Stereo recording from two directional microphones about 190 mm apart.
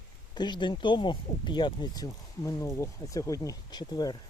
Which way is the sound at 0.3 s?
25° left (ahead or behind).